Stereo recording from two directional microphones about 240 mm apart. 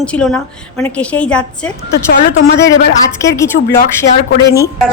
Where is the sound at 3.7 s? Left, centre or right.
Left.